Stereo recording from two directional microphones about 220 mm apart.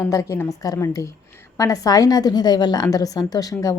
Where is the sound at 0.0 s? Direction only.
15° left (ahead or behind).